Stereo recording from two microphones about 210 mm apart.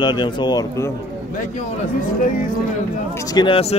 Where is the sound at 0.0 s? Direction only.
20° left (ahead or behind).